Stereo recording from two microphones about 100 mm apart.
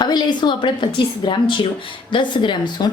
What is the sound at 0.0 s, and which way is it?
A woman's voice, 50° left (ahead or behind).